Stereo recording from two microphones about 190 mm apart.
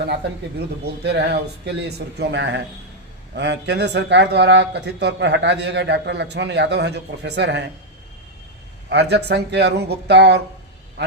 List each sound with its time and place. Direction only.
1.0 s speech: 60° right (ahead or behind)
8.9 s speech: 60° right (ahead or behind)